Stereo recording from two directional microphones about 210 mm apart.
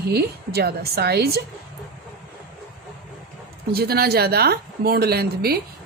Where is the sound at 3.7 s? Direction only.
50° right (ahead or behind).